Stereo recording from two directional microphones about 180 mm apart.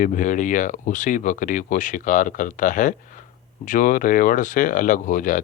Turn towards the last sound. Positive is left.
turn(degrees=45)  # may be behind; listen again after turning